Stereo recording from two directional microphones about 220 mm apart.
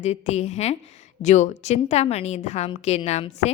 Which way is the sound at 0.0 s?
30° left (ahead or behind).